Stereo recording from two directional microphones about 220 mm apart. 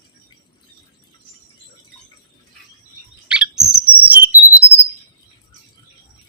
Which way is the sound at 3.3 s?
5° right (ahead or behind).